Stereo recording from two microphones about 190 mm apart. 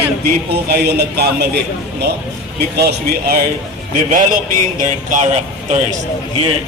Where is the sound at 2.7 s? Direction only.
55° right (ahead or behind).